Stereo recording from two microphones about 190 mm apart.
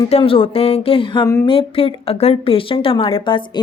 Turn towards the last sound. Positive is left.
turn(degrees=25)  # may be behind; listen again after turning